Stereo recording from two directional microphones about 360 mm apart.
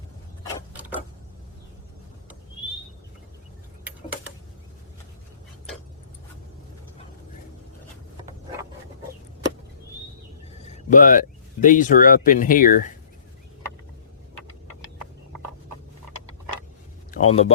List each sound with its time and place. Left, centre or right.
0.7 s mechanisms: centre
10.8 s speech: left
17.1 s speech: centre